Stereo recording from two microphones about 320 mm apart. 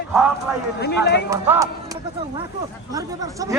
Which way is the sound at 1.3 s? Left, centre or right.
Centre.